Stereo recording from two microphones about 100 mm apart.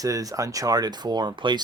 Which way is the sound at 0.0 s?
35° right (ahead or behind).